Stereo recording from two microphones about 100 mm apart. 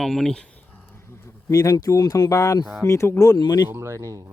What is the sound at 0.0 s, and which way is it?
Speech, 5° left (ahead or behind).